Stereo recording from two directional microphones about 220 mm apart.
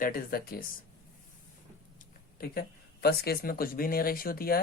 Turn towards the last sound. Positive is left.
turn(degrees=40)  # may be behind; listen again after turning